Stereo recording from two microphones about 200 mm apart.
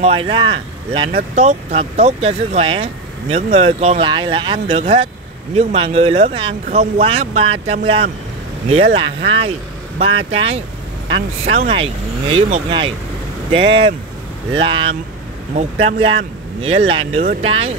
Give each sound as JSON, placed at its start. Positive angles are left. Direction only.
{"t": 0.0, "sound": "speech", "side_deg": -25}
{"t": 1.1, "sound": "speech", "side_deg": -35}